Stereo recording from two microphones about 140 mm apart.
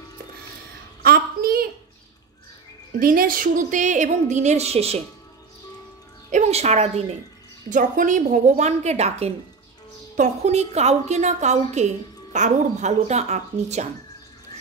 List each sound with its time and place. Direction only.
1.0 s a sound: 90° right
3.0 s a woman's voice: 90° right; by 5.0 s 50° right (ahead or behind)
6.3 s speech: 55° right (ahead or behind)
7.7 s a woman's voice: 65° right (ahead or behind)